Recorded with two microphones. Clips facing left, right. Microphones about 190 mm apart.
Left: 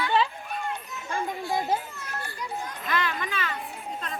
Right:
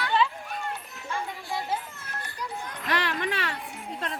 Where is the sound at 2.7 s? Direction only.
70° right (ahead or behind).